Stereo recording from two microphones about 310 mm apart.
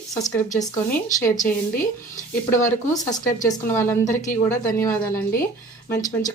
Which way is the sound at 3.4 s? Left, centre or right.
Centre.